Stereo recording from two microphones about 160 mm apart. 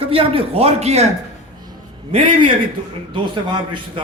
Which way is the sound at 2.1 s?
35° right (ahead or behind).